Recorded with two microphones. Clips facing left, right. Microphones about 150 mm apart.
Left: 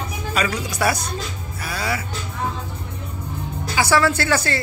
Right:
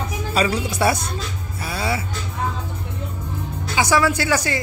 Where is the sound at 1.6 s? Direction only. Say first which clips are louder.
Right 1 dB; 25° right (ahead or behind).